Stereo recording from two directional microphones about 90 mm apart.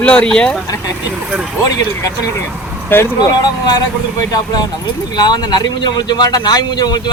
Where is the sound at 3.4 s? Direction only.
50° left (ahead or behind).